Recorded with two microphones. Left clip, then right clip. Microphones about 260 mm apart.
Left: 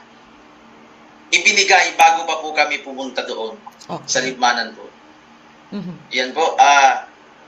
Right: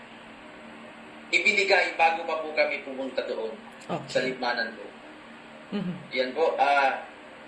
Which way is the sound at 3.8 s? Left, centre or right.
Left.